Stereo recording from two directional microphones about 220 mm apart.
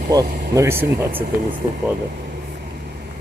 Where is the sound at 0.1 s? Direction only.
15° right (ahead or behind).